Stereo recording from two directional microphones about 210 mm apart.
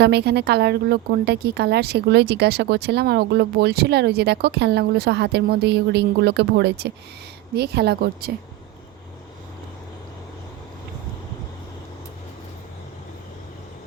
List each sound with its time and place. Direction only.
0.0 s speech: 50° right (ahead or behind)